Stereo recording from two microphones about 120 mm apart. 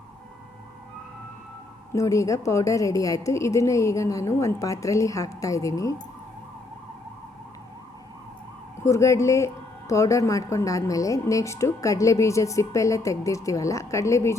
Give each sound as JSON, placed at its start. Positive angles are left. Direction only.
{"t": 1.9, "sound": "speech", "side_deg": 25}
{"t": 8.8, "sound": "speech", "side_deg": 25}